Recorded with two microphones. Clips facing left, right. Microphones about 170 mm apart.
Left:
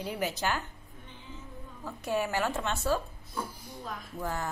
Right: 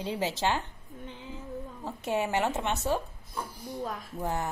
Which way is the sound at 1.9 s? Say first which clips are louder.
Right 1 dB; 20° right (ahead or behind).